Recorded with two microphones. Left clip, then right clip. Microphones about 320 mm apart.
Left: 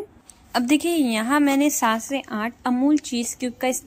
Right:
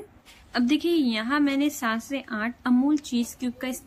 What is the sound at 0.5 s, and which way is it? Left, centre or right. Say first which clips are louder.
A woman's voice: left 3 dB; centre.